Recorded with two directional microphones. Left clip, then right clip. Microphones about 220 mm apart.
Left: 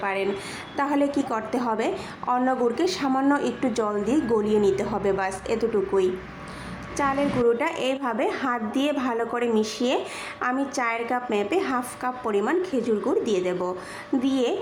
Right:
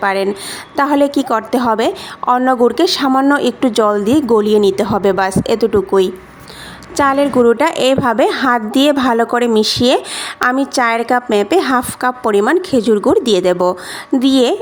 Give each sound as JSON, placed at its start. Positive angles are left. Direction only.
{"t": 0.0, "sound": "a woman's voice", "side_deg": -45}